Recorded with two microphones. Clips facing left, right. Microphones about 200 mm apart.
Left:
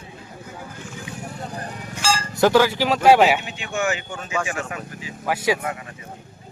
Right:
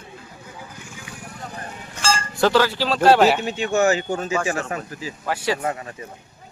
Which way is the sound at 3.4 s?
40° right (ahead or behind).